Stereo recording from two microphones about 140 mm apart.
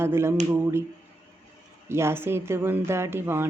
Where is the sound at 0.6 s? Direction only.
20° right (ahead or behind).